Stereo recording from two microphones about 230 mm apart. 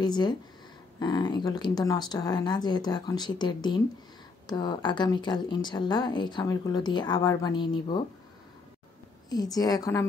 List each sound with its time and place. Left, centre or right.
0.0 s a woman's voice: centre
9.3 s speech: centre